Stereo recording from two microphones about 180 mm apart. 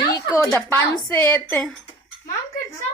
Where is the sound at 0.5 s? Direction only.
10° left (ahead or behind).